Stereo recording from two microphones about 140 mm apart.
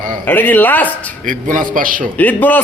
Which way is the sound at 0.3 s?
10° left (ahead or behind).